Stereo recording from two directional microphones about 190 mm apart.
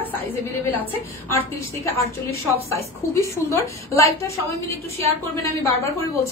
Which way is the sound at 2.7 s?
15° left (ahead or behind).